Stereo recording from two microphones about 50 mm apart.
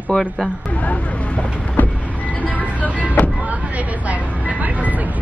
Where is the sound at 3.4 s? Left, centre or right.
Right.